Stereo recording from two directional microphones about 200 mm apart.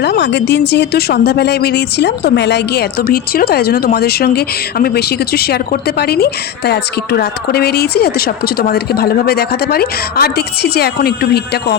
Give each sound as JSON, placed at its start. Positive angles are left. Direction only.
{"t": 0.0, "sound": "speech", "side_deg": 55}